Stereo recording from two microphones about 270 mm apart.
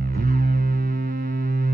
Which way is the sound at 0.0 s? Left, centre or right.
Right.